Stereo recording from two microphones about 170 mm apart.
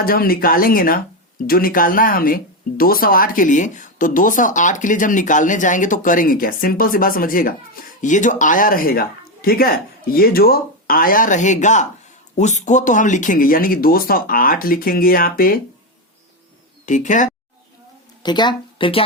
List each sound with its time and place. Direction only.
0.0 s speech: 60° left (ahead or behind)
16.8 s speech: 45° left (ahead or behind)
18.2 s speech: 25° left (ahead or behind)